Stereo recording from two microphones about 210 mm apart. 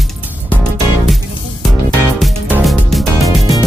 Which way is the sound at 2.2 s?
5° right (ahead or behind).